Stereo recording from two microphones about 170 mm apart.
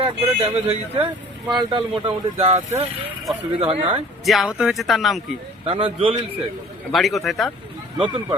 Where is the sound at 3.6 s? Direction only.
30° right (ahead or behind).